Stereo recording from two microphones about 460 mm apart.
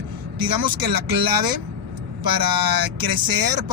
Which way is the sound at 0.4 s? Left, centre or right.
Right.